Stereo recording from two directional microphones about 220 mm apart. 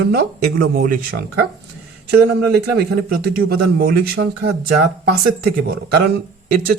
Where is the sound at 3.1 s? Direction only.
45° right (ahead or behind).